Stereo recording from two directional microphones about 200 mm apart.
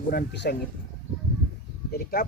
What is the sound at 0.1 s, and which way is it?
Speech, 50° left (ahead or behind).